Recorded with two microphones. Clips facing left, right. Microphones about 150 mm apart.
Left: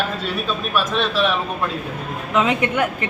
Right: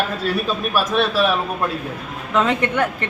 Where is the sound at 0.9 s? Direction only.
10° right (ahead or behind).